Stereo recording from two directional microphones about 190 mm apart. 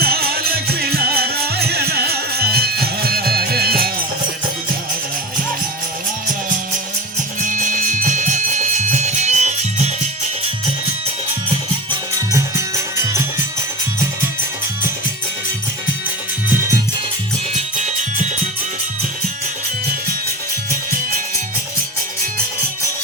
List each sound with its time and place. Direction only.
0.0 s music: 55° right (ahead or behind)
7.4 s music: 45° right (ahead or behind)
12.3 s music: 15° right (ahead or behind)